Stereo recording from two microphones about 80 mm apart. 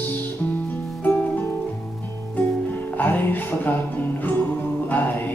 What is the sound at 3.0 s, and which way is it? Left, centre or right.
Speech, left.